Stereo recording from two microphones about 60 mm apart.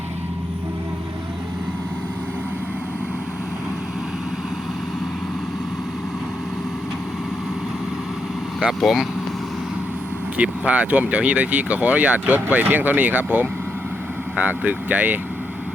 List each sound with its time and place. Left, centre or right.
8.8 s speech: centre
10.3 s speech: right